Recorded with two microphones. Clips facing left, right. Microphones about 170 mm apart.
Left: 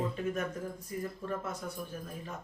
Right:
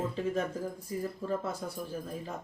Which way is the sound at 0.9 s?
25° right (ahead or behind).